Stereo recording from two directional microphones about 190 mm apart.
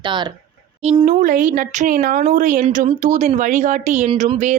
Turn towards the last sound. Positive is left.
turn(degrees=-40)  # may be behind; listen again after turning